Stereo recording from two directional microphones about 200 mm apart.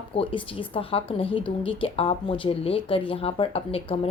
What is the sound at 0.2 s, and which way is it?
Speech, 25° left (ahead or behind).